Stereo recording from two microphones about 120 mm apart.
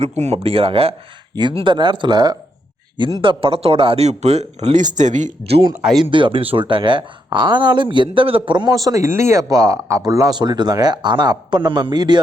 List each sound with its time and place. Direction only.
0.2 s speech: 60° right (ahead or behind); by 2.3 s 35° right (ahead or behind)
3.0 s speech: 50° right (ahead or behind); by 5.3 s 90° right
5.4 s speech: 55° right (ahead or behind); by 12.2 s 35° right (ahead or behind)